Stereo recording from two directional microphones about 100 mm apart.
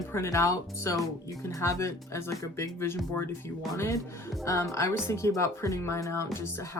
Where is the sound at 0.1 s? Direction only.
30° left (ahead or behind).